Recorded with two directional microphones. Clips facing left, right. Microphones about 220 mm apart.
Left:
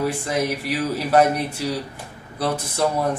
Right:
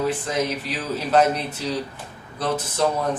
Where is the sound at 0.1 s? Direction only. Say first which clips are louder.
Left 1 dB; 10° left (ahead or behind).